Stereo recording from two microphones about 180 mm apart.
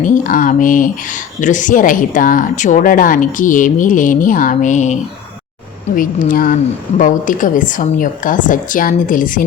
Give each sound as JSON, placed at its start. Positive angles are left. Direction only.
{"t": 0.0, "sound": "speech", "side_deg": 45}